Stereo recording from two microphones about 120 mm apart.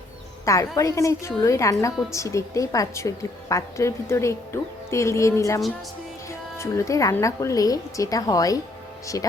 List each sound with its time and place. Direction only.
0.4 s a woman's voice: 25° left (ahead or behind)